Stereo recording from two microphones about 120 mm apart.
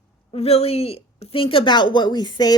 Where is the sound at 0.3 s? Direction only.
60° left (ahead or behind).